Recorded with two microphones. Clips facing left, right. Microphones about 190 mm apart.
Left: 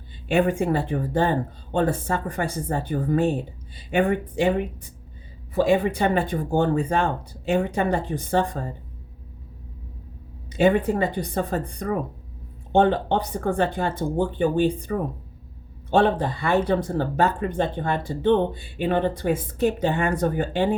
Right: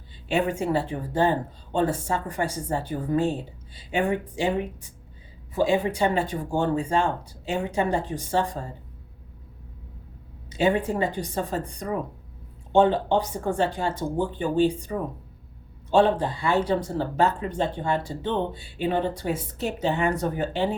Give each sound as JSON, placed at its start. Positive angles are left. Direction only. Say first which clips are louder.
{"t": 0.3, "sound": "speech", "louder": "left 3 dB", "side_deg": 55}
{"t": 10.5, "sound": "speech", "louder": "left 4 dB", "side_deg": 60}